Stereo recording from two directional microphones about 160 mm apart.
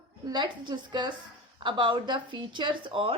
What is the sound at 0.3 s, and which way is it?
A woman's voice, 30° right (ahead or behind).